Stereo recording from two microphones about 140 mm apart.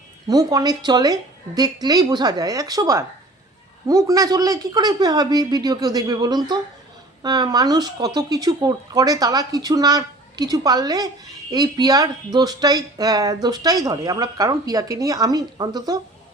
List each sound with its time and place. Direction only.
0.3 s speech: 25° right (ahead or behind)